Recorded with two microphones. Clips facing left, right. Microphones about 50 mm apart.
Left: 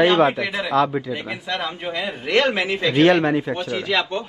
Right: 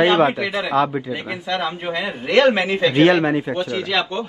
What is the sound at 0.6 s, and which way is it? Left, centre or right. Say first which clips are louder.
Speech: left 1 dB; centre.